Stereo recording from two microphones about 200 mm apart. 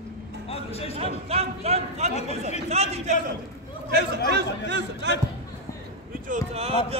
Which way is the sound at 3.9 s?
55° right (ahead or behind).